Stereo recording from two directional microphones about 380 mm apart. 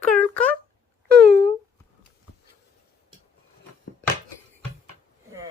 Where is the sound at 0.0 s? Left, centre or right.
Centre.